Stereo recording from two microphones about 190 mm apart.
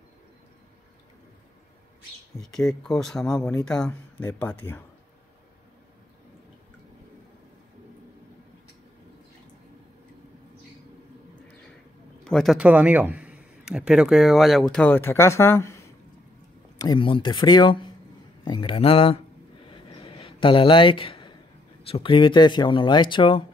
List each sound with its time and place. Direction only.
2.4 s speech: 5° left (ahead or behind)
12.3 s speech: centre (ahead or behind); by 19.1 s 30° left (ahead or behind)
19.7 s a sound: 25° left (ahead or behind)
21.8 s speech: 30° left (ahead or behind)